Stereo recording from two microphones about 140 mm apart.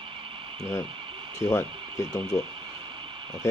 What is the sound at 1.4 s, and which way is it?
Speech, 20° left (ahead or behind).